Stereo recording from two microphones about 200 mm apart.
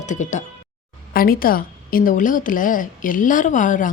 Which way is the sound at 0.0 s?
40° left (ahead or behind).